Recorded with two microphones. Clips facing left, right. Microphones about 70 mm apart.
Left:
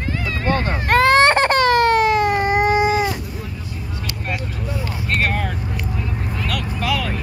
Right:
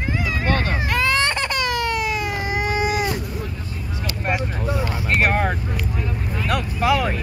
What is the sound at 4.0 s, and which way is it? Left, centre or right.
Vehicle, right.